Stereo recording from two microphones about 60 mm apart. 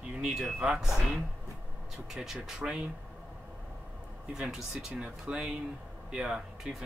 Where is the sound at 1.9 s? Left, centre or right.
Centre.